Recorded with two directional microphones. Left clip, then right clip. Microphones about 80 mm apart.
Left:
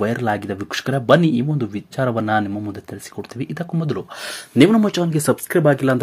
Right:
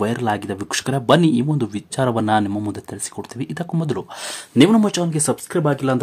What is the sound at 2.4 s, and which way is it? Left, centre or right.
Speech, right.